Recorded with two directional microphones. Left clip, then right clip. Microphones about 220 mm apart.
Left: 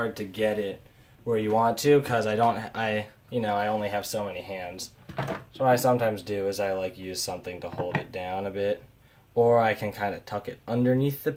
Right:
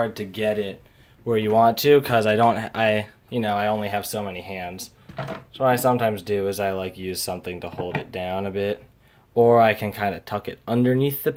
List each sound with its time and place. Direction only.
0.0 s speech: 40° right (ahead or behind)